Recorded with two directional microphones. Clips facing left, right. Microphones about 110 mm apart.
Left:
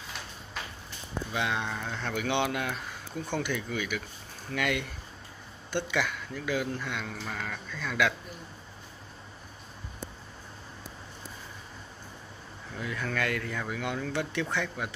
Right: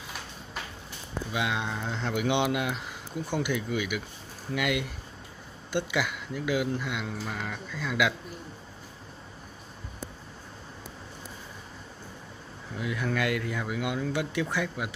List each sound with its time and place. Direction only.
1.3 s speech: 10° right (ahead or behind)
12.7 s speech: 10° right (ahead or behind)